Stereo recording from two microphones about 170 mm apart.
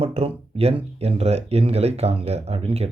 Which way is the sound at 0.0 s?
35° right (ahead or behind).